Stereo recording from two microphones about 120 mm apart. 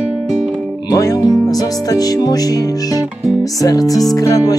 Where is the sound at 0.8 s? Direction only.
30° left (ahead or behind).